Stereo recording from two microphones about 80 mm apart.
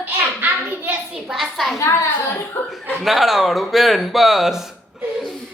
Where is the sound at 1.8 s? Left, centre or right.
Left.